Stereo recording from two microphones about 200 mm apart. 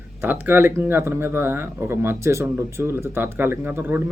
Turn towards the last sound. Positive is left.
turn(degrees=-10)  # may be behind; listen again after turning